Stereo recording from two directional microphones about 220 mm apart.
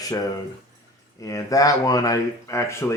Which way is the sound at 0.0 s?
15° left (ahead or behind).